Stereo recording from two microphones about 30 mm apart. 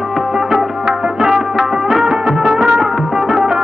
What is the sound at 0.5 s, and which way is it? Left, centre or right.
Music, right.